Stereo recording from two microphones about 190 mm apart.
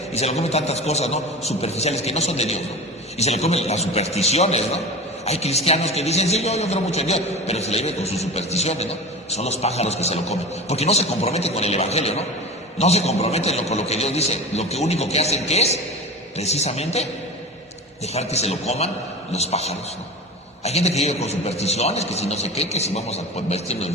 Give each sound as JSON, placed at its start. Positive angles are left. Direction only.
{"t": 0.1, "sound": "a man's voice", "side_deg": 35}